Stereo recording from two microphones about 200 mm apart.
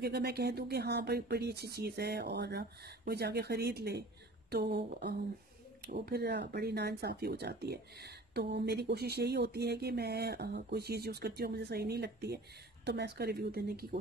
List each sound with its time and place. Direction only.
0.0 s speech: 55° right (ahead or behind)